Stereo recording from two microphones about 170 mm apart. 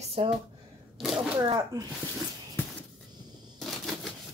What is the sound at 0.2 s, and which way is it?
Speech, 35° right (ahead or behind).